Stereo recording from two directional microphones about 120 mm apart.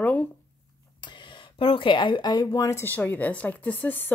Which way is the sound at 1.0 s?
40° left (ahead or behind).